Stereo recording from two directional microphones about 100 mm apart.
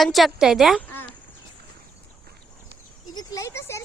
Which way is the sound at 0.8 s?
20° left (ahead or behind).